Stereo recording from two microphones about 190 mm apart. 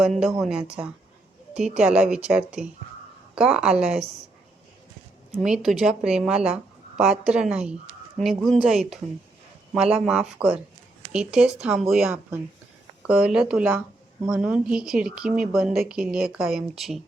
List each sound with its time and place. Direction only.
0.0 s speech: centre (ahead or behind)
1.7 s speech: 5° right (ahead or behind)
5.3 s speech: centre (ahead or behind)